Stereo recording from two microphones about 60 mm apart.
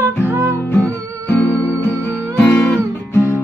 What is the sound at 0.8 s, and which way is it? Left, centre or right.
Music, left.